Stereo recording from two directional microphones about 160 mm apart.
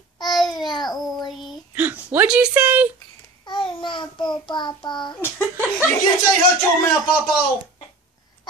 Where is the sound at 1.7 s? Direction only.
10° right (ahead or behind).